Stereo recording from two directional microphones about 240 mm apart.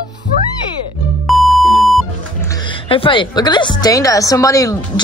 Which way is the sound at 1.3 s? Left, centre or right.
Centre.